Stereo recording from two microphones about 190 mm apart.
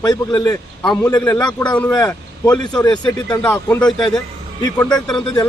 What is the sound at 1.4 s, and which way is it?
A man's voice, 20° left (ahead or behind).